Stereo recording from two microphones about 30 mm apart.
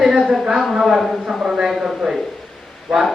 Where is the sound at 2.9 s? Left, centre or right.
Centre.